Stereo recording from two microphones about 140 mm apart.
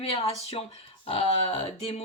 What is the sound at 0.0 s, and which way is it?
Speech, 45° left (ahead or behind).